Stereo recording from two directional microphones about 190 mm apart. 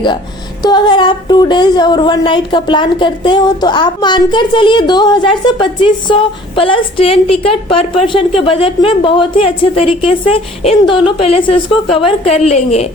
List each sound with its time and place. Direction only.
0.6 s speech: 20° left (ahead or behind)